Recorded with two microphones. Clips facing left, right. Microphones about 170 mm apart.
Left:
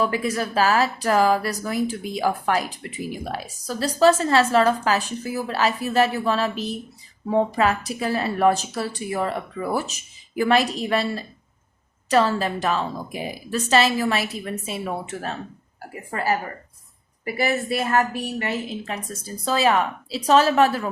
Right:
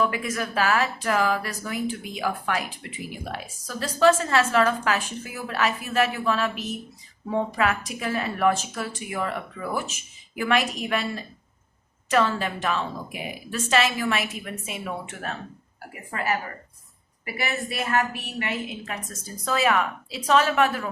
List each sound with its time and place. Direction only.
0.0 s speech: 30° left (ahead or behind)
17.3 s speech: 35° left (ahead or behind)